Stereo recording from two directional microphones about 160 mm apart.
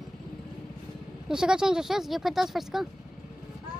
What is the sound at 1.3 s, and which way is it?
Speech, 5° right (ahead or behind).